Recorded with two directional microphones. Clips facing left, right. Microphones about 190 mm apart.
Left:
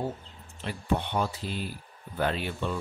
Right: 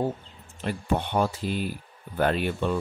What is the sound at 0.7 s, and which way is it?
A man's voice, 50° right (ahead or behind).